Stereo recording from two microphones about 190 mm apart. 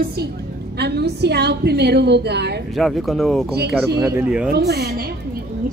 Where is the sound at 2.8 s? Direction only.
Centre (ahead or behind).